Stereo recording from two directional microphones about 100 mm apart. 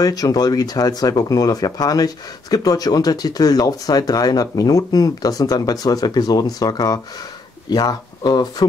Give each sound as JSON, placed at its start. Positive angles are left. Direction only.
{"t": 0.0, "sound": "speech", "side_deg": 40}